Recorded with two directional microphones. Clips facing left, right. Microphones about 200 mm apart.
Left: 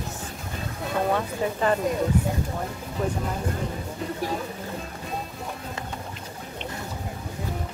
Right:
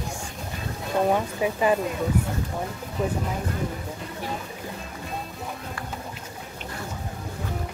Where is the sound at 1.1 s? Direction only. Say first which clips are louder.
Right 1 dB; 10° right (ahead or behind).